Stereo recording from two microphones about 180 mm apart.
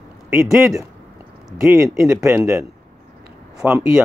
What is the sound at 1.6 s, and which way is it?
Speech, 15° right (ahead or behind).